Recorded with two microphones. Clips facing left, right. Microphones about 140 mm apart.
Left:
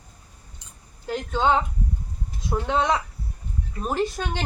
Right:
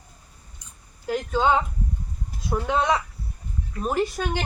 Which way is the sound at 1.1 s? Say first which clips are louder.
Right 1 dB; 10° right (ahead or behind).